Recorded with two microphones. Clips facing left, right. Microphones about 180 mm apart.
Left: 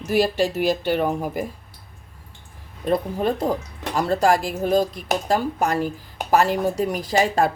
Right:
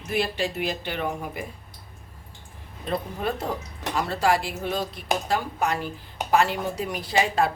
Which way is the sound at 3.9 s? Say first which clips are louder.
Left 5 dB; 45° left (ahead or behind).